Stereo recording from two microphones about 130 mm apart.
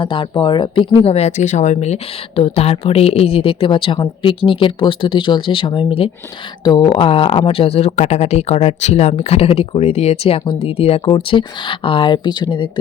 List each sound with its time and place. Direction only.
0.0 s speech: 40° left (ahead or behind)
11.1 s speech: 40° left (ahead or behind)